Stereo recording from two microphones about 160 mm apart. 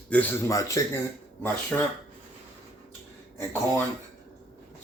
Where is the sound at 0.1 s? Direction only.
10° left (ahead or behind).